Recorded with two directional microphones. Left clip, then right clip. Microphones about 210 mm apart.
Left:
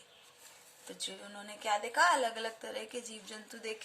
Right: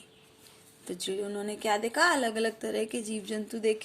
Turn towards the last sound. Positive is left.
turn(degrees=-35)  # may be behind; listen again after turning